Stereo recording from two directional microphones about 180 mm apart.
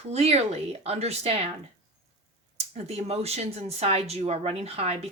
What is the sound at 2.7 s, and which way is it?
Speech, 35° right (ahead or behind).